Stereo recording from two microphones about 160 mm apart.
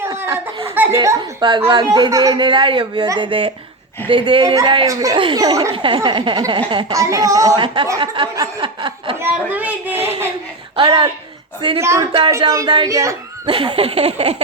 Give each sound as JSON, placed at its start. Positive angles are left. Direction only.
{"t": 0.0, "sound": "a sound", "side_deg": -15}
{"t": 0.7, "sound": "a woman's voice", "side_deg": -15}
{"t": 0.9, "sound": "a woman's voice", "side_deg": -25}
{"t": 9.1, "sound": "a woman's voice", "side_deg": -10}
{"t": 10.8, "sound": "a woman's voice", "side_deg": -30}
{"t": 11.8, "sound": "a woman's voice", "side_deg": -15}
{"t": 13.5, "sound": "a sound", "side_deg": -35}